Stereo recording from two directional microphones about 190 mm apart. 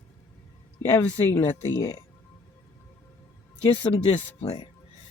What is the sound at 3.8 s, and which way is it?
Speech, 25° left (ahead or behind).